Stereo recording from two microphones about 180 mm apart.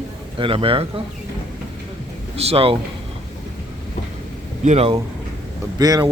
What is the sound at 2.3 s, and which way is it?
Speech, 35° right (ahead or behind).